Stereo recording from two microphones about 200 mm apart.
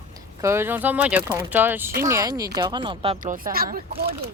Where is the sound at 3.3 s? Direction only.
45° right (ahead or behind).